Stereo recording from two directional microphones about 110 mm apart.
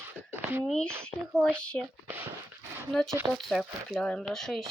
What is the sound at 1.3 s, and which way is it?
Speech, 10° left (ahead or behind).